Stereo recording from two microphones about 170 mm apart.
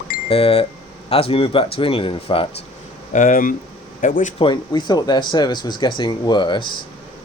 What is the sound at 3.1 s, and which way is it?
Speech, 55° left (ahead or behind).